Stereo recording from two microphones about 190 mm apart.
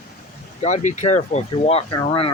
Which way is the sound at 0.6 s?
40° left (ahead or behind).